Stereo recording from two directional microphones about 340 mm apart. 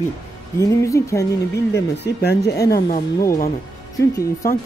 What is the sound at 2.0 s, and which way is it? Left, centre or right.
Speech, left.